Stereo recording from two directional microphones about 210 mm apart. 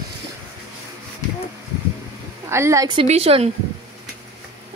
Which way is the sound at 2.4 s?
15° right (ahead or behind).